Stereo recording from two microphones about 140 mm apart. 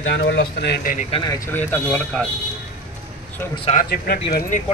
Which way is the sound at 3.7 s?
90° left.